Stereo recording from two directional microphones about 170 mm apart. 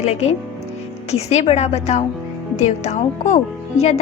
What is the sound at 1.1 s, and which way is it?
A woman's voice, 40° left (ahead or behind).